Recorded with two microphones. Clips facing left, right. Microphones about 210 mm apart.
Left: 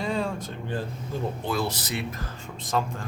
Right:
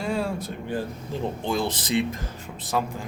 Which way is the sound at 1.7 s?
90° right.